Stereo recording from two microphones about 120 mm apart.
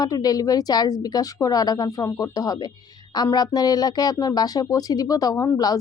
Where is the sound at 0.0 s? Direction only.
30° left (ahead or behind).